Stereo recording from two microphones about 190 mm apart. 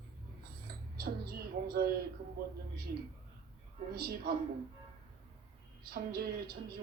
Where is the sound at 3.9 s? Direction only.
55° right (ahead or behind).